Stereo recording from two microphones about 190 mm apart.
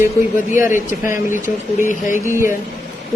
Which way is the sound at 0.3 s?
45° left (ahead or behind).